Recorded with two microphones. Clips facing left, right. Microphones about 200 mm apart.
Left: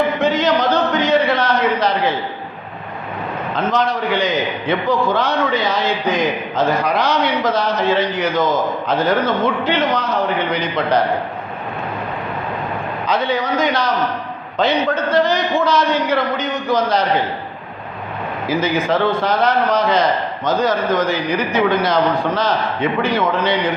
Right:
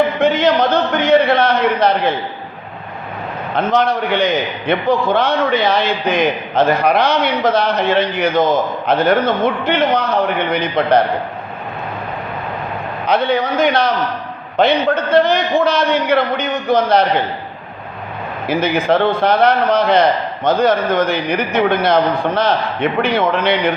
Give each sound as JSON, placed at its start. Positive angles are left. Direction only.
{"t": 0.2, "sound": "a sound", "side_deg": -60}
{"t": 3.5, "sound": "a man's voice", "side_deg": -60}
{"t": 13.1, "sound": "a man's voice", "side_deg": -60}
{"t": 18.4, "sound": "a man's voice", "side_deg": -60}